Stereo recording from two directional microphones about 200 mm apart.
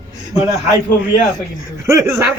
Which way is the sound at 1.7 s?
15° right (ahead or behind).